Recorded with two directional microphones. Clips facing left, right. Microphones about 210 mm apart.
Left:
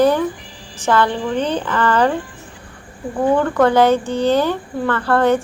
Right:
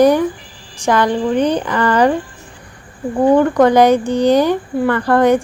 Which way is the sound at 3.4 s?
15° right (ahead or behind).